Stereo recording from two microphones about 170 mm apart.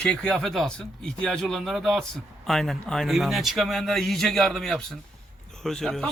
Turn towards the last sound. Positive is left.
turn(degrees=5)  # may be behind; listen again after turning